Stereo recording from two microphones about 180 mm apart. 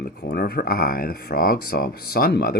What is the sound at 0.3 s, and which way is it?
Speech, 60° left (ahead or behind).